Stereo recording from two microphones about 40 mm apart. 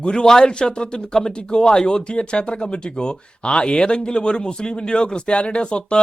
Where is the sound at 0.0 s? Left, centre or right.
Left.